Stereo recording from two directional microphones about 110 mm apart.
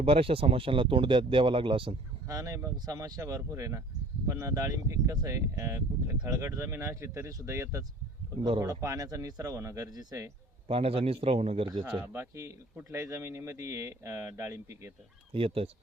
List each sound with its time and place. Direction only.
0.0 s speech: 60° right (ahead or behind)
2.2 s speech: 30° right (ahead or behind)
10.7 s a man's voice: 60° right (ahead or behind)
12.1 s speech: 20° right (ahead or behind)
15.3 s a man's voice: 60° right (ahead or behind)